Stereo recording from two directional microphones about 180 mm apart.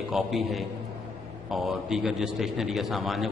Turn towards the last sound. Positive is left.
turn(degrees=0)  # may be behind; listen again after turning